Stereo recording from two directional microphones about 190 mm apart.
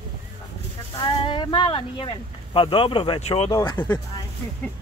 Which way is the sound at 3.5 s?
20° left (ahead or behind).